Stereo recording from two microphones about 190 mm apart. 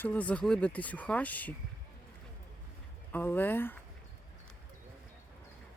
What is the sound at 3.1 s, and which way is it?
Speech, 10° left (ahead or behind).